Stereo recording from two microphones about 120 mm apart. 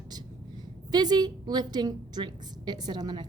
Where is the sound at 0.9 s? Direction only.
35° right (ahead or behind).